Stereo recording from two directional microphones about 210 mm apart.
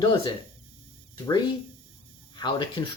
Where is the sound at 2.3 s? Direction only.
20° left (ahead or behind).